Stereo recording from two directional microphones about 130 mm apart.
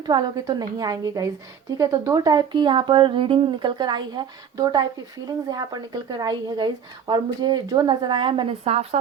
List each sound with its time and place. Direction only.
0.1 s a woman's voice: 30° right (ahead or behind); by 9.0 s 55° right (ahead or behind)